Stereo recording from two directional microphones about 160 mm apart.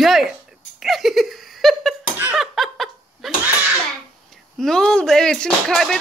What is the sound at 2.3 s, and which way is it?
Laughter, centre (ahead or behind).